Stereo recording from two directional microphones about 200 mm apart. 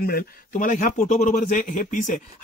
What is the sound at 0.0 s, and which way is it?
Speech, 45° left (ahead or behind).